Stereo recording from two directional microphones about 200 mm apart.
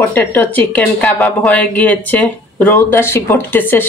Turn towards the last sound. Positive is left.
turn(degrees=10)  # may be behind; listen again after turning